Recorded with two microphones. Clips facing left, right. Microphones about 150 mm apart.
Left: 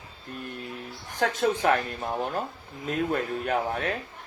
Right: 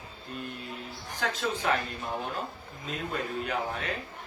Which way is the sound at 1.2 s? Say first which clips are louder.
Left 7 dB; 55° left (ahead or behind).